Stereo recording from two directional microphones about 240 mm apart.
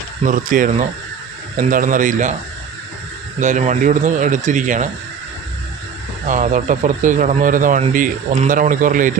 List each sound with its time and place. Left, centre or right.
0.3 s speech: right
3.4 s speech: right
6.2 s speech: right